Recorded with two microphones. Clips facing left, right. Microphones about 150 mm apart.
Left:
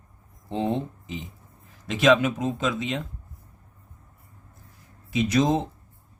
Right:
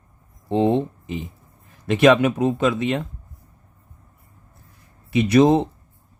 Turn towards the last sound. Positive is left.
turn(degrees=-65)  # may be behind; listen again after turning